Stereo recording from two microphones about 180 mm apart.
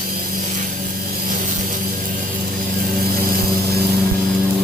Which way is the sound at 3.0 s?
55° right (ahead or behind).